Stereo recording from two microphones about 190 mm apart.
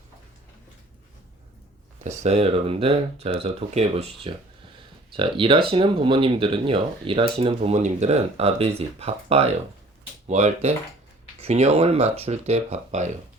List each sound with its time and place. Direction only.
2.0 s speech: 35° right (ahead or behind)